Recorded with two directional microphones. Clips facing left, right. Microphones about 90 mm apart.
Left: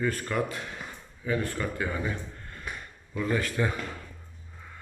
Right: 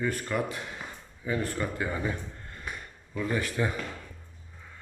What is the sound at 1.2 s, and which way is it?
Speech, 25° right (ahead or behind).